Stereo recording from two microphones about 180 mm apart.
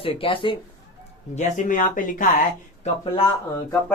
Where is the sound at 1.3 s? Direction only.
45° left (ahead or behind).